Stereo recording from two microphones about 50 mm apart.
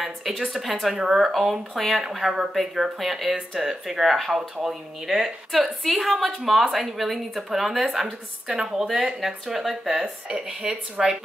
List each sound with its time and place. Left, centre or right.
0.3 s a woman's voice: centre
10.3 s speech: centre